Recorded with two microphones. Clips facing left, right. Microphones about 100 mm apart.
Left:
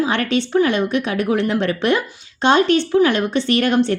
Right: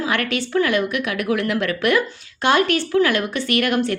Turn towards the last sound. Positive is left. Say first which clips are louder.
# left 3 dB
turn(degrees=30)  # may be behind; listen again after turning